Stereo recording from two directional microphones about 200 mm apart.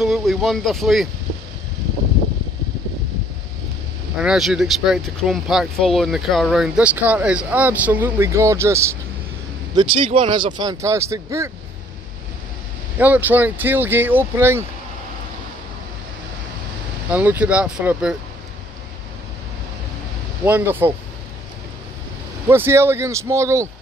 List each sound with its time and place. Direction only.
0.0 s speech: centre (ahead or behind)
4.2 s speech: centre (ahead or behind)
9.8 s speech: 25° right (ahead or behind)
12.9 s speech: 10° right (ahead or behind)
17.1 s speech: 10° right (ahead or behind)
20.4 s speech: 10° right (ahead or behind)
22.5 s speech: 10° right (ahead or behind)